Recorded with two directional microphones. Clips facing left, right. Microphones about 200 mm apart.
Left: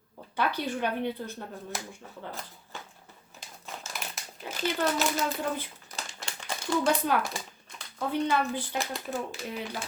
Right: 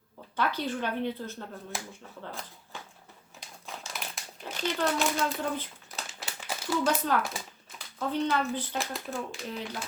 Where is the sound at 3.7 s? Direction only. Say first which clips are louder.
Even; centre (ahead or behind).